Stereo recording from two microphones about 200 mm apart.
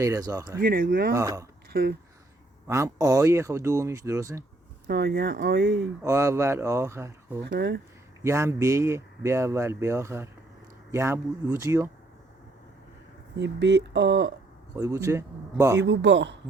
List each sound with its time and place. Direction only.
0.0 s speech: 15° right (ahead or behind)
0.6 s speech: 45° right (ahead or behind)
1.1 s speech: 15° right (ahead or behind)
1.7 s speech: 50° right (ahead or behind)
2.6 s speech: 15° right (ahead or behind)
4.9 s speech: 60° right (ahead or behind)
6.0 s speech: 15° right (ahead or behind)
7.4 s speech: 55° right (ahead or behind)
8.2 s speech: 15° right (ahead or behind)
13.3 s speech: 60° right (ahead or behind)
14.8 s speech: 15° right (ahead or behind)
15.8 s speech: 65° right (ahead or behind)